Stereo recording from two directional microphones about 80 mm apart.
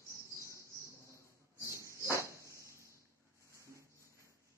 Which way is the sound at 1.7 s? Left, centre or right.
Right.